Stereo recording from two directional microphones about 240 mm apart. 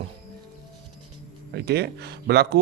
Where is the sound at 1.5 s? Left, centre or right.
Right.